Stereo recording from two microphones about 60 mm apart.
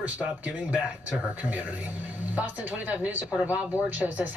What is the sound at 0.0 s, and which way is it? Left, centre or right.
Speech, right.